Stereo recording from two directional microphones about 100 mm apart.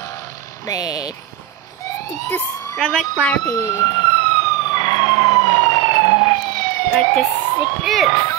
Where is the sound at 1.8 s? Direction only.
30° left (ahead or behind).